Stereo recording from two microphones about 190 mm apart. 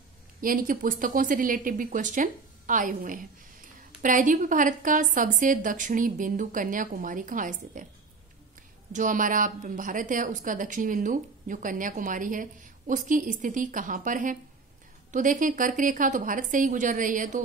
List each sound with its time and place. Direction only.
0.4 s a woman's voice: 45° right (ahead or behind)
8.9 s a woman's voice: 45° right (ahead or behind)